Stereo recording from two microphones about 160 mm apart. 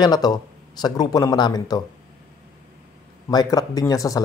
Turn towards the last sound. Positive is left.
turn(degrees=20)  # may be behind; listen again after turning